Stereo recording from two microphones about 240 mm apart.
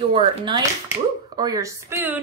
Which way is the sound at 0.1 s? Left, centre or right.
Right.